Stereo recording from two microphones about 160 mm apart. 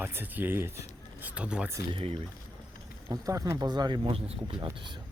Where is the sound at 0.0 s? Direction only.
10° right (ahead or behind).